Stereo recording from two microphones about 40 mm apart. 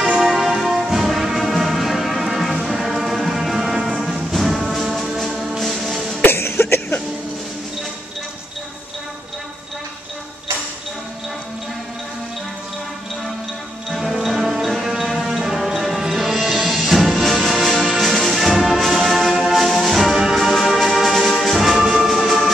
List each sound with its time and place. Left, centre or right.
0.2 s music: centre
5.3 s music: centre
5.6 s music: centre
6.2 s cough: left
13.8 s music: centre
17.8 s orchestra: centre